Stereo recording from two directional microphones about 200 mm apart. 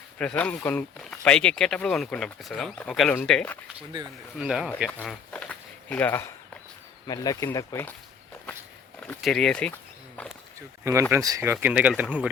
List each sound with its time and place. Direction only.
0.2 s speech: 5° left (ahead or behind)
5.3 s a sound: 5° left (ahead or behind)
7.1 s speech: 20° left (ahead or behind)
9.0 s speech: 5° left (ahead or behind)
11.1 s speech: 15° right (ahead or behind)